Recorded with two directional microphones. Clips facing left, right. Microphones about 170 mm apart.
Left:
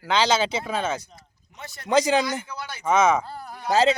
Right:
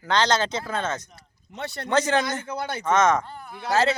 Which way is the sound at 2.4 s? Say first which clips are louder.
Right 6 dB; 55° right (ahead or behind).